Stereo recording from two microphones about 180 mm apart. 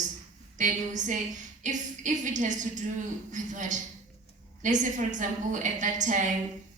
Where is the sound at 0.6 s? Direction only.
45° right (ahead or behind).